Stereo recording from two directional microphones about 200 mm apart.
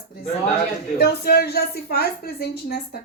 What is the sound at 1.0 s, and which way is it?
Speech, 50° left (ahead or behind).